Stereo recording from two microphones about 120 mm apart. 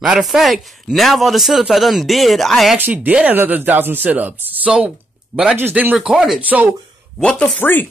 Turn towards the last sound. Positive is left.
turn(degrees=15)  # may be behind; listen again after turning